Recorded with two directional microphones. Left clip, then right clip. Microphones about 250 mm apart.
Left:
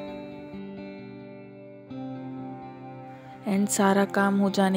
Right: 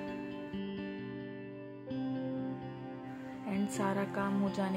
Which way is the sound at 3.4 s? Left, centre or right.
Left.